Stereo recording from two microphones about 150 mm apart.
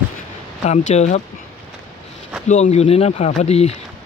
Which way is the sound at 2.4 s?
50° left (ahead or behind).